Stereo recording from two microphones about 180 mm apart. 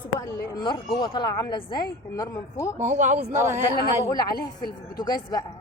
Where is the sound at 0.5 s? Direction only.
25° left (ahead or behind).